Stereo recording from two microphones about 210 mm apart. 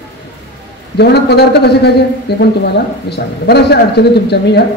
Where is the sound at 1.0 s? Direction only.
50° left (ahead or behind).